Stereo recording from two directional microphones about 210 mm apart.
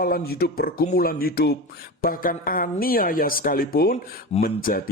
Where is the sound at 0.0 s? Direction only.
45° left (ahead or behind).